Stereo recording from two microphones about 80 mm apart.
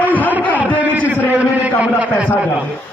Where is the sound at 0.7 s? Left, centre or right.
Left.